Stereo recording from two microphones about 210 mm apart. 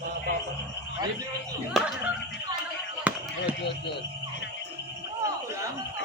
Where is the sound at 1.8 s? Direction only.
Centre (ahead or behind).